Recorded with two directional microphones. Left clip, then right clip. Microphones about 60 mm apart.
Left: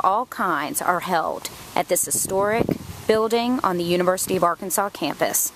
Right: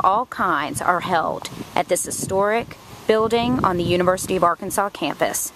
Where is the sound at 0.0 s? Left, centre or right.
Centre.